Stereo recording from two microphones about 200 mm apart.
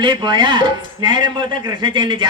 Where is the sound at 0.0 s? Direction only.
25° right (ahead or behind).